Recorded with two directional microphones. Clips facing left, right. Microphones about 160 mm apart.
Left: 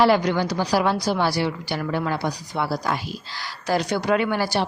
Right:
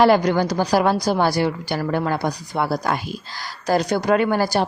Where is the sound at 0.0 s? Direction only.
45° right (ahead or behind).